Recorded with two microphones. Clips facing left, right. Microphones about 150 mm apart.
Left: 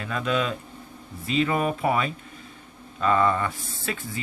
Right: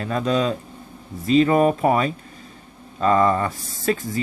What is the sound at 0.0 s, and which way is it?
Speech, 35° right (ahead or behind).